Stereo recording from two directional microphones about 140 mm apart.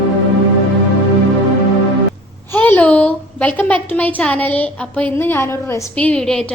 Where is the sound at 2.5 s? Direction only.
15° left (ahead or behind).